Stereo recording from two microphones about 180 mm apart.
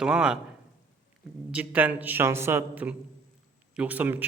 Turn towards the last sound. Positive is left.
turn(degrees=-10)  # may be behind; listen again after turning